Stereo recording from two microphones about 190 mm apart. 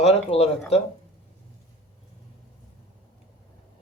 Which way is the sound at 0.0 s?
35° left (ahead or behind).